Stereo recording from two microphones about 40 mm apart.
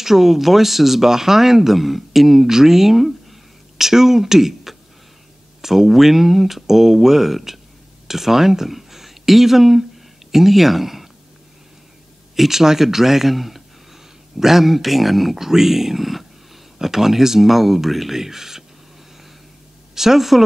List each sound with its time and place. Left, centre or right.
0.0 s speech: centre
12.4 s speech: centre
20.0 s speech: centre